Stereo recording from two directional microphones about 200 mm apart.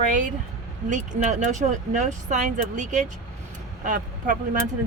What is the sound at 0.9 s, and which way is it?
Speech, 35° right (ahead or behind).